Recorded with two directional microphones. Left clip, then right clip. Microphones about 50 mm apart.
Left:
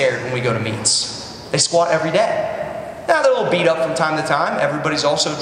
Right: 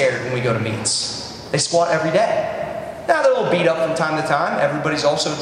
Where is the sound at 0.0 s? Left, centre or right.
Left.